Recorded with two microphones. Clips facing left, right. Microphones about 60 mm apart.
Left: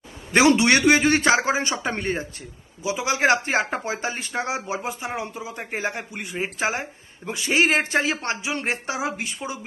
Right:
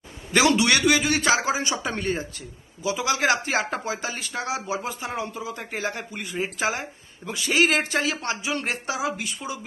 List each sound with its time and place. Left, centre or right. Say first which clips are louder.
0.3 s a man's voice: left 3 dB; left
2.8 s speech: left 2 dB; left
6.3 s speech: left 1 dB; left